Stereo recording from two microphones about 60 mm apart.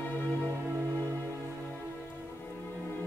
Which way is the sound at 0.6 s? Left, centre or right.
Right.